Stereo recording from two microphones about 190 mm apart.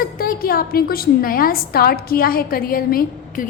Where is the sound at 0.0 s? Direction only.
50° left (ahead or behind).